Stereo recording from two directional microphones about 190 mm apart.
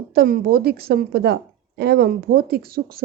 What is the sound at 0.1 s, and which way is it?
A woman's voice, 55° right (ahead or behind).